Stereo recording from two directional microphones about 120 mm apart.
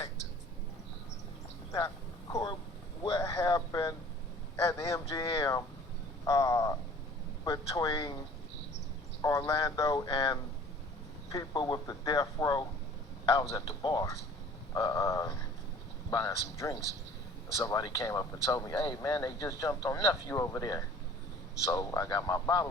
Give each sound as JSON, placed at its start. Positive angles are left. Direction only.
{"t": 3.0, "sound": "speech", "side_deg": 30}
{"t": 9.5, "sound": "speech", "side_deg": 30}